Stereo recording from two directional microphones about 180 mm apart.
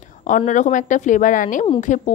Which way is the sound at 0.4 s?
40° left (ahead or behind).